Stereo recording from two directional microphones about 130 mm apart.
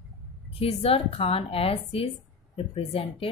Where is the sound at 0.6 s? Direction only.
50° left (ahead or behind).